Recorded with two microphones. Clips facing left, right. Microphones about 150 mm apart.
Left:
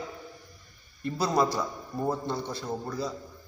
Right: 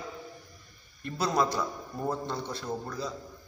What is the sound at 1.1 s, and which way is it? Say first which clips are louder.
Speech: left 2 dB; centre (ahead or behind).